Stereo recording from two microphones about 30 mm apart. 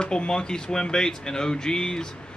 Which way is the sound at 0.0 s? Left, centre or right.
Left.